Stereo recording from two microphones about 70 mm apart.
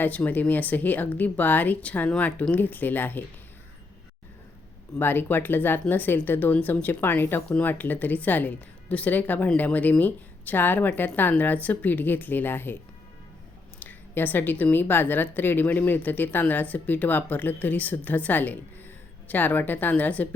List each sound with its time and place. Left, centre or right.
0.0 s a woman's voice: left
4.9 s a woman's voice: left